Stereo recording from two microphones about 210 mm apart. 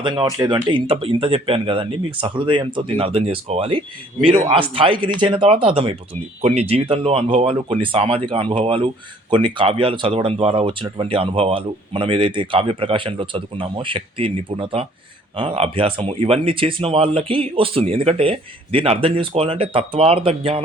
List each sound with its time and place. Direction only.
0.0 s speech: 20° right (ahead or behind)